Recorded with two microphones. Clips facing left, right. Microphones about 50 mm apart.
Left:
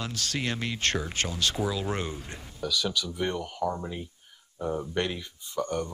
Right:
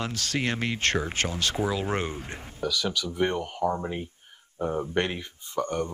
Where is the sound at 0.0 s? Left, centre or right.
Right.